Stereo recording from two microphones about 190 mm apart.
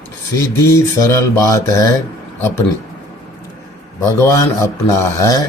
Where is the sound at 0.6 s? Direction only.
15° left (ahead or behind).